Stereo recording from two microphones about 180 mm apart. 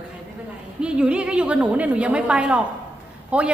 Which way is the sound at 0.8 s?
5° right (ahead or behind).